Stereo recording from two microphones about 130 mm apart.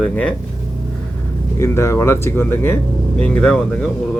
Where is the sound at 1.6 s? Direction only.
20° left (ahead or behind).